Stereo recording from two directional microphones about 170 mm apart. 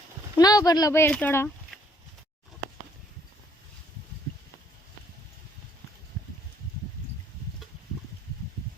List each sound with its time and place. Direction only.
0.3 s speech: 20° left (ahead or behind)